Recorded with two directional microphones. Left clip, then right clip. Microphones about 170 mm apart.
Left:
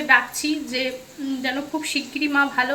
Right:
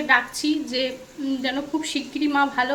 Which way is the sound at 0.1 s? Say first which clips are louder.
Left 2 dB; 20° right (ahead or behind).